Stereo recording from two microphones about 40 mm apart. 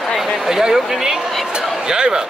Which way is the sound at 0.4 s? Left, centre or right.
Centre.